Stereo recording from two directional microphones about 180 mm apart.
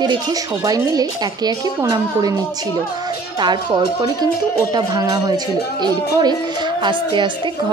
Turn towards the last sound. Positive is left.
turn(degrees=-25)  # may be behind; listen again after turning